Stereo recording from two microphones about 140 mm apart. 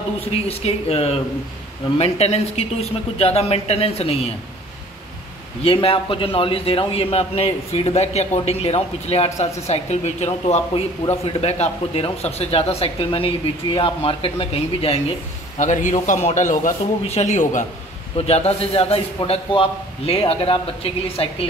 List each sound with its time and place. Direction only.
0.3 s a man's voice: 45° left (ahead or behind)
5.6 s a man's voice: 45° left (ahead or behind)
15.6 s a man's voice: 60° left (ahead or behind)
18.1 s a man's voice: 45° left (ahead or behind)